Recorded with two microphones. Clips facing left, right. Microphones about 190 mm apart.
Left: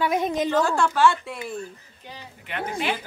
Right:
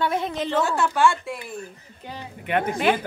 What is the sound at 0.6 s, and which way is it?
Speech, centre (ahead or behind).